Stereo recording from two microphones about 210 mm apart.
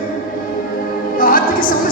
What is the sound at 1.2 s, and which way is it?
Music, 40° left (ahead or behind).